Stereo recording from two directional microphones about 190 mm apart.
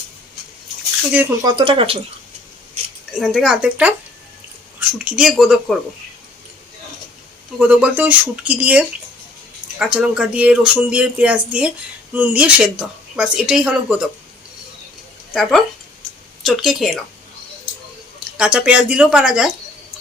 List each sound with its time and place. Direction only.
1.5 s speech: 25° right (ahead or behind)
3.1 s speech: centre (ahead or behind)
7.6 s speech: 5° right (ahead or behind)
15.3 s speech: centre (ahead or behind)
18.3 s speech: 5° right (ahead or behind)